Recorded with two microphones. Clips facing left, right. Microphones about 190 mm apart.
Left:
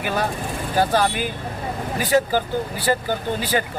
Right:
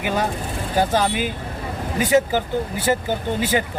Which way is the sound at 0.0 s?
20° right (ahead or behind).